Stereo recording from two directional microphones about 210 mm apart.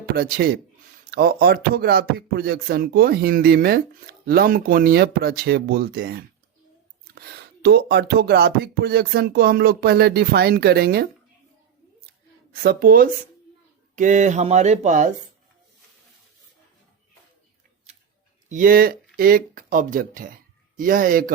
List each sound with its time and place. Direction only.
0.2 s speech: 45° right (ahead or behind)
12.6 s speech: 45° right (ahead or behind)
18.4 s speech: 40° right (ahead or behind)